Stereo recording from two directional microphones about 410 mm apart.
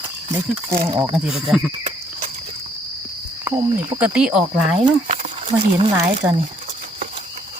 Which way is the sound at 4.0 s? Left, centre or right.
Centre.